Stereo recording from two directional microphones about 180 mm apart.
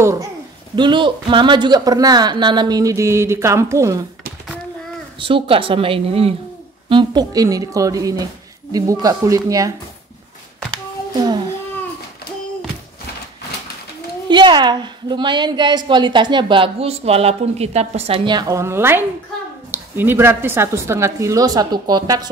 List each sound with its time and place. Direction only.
0.0 s a child's voice: 15° right (ahead or behind)
5.2 s a woman's voice: 30° right (ahead or behind)
14.3 s a woman's voice: 25° right (ahead or behind)